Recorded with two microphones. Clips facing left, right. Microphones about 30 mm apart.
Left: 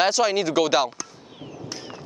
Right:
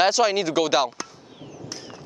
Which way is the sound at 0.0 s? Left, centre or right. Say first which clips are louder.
Right 1 dB; centre.